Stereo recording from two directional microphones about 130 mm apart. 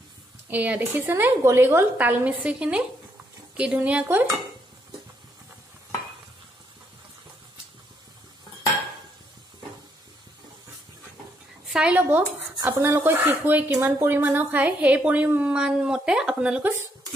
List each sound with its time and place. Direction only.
0.5 s speech: 15° right (ahead or behind)
11.7 s speech: 10° right (ahead or behind)
12.5 s cutlery: 30° right (ahead or behind)
12.8 s speech: 15° right (ahead or behind)